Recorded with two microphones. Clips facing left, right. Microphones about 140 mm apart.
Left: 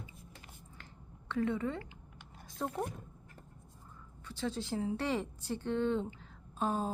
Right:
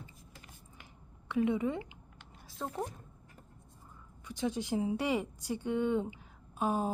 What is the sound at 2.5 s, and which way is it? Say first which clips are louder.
Speech: left 1 dB; centre (ahead or behind).